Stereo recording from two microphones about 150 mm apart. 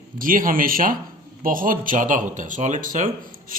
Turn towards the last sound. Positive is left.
turn(degrees=-60)  # may be behind; listen again after turning